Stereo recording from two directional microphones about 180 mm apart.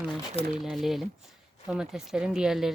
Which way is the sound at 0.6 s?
Centre (ahead or behind).